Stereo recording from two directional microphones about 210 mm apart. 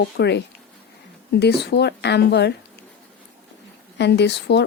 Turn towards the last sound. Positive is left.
turn(degrees=55)  # may be behind; listen again after turning